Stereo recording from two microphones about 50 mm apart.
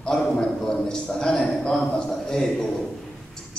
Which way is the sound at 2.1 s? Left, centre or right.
Centre.